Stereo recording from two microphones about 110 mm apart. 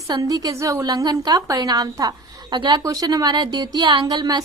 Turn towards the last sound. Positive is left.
turn(degrees=-40)  # may be behind; listen again after turning